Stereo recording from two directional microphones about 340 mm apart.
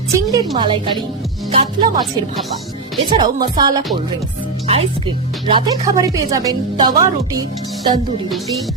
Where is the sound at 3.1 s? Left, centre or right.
Centre.